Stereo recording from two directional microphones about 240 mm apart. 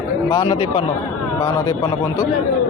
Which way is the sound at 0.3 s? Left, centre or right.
Centre.